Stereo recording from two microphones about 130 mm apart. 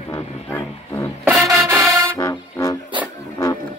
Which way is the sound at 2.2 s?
25° left (ahead or behind).